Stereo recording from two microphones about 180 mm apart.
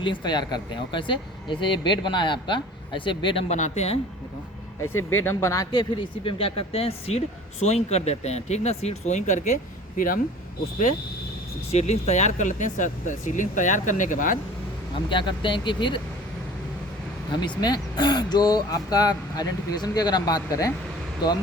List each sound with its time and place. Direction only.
0.0 s speech: 25° left (ahead or behind)
4.8 s speech: 15° left (ahead or behind); by 9.6 s 40° left (ahead or behind)
11.7 s speech: 40° left (ahead or behind)
15.1 s speech: 25° left (ahead or behind)
17.6 s speech: 25° left (ahead or behind)